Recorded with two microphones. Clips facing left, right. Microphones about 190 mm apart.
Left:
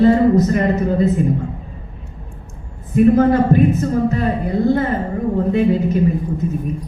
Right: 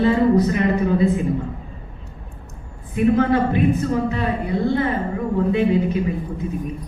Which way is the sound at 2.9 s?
45° left (ahead or behind).